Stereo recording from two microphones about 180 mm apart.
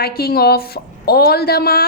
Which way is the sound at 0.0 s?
60° left (ahead or behind).